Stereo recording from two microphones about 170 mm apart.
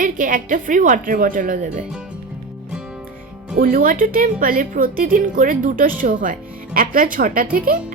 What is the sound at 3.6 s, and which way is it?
A woman's voice, 55° right (ahead or behind).